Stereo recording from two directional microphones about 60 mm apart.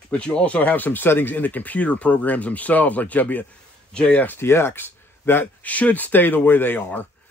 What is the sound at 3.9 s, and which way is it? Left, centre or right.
Speech, centre.